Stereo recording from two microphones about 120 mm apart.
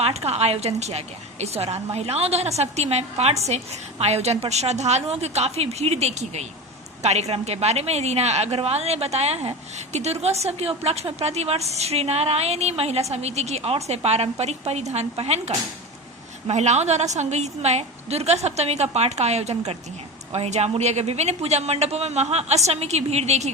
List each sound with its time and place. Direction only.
0.0 s a woman's voice: 60° right (ahead or behind)
16.5 s a woman's voice: 70° right (ahead or behind)